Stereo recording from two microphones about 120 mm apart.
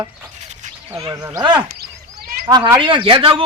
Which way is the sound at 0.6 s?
90° right.